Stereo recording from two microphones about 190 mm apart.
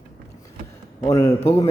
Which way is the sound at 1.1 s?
15° left (ahead or behind).